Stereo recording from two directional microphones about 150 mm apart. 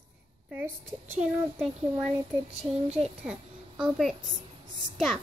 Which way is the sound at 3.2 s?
5° right (ahead or behind).